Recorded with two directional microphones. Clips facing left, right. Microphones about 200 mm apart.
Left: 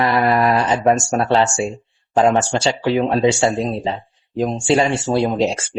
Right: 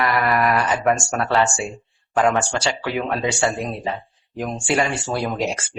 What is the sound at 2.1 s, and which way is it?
Speech, 25° left (ahead or behind).